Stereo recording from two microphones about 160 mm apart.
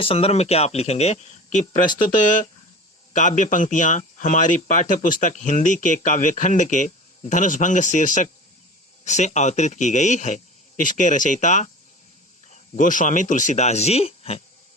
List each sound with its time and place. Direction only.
0.0 s speech: 35° left (ahead or behind)